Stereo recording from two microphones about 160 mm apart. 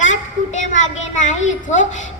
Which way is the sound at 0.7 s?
50° left (ahead or behind).